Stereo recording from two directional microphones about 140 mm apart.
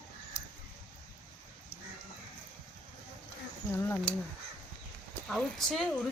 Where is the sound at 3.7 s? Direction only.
15° left (ahead or behind).